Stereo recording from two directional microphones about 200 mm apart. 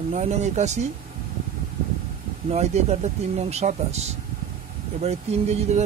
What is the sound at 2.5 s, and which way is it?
Speech, 35° right (ahead or behind).